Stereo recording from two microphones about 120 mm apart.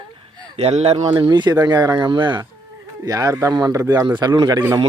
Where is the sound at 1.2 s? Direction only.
40° right (ahead or behind).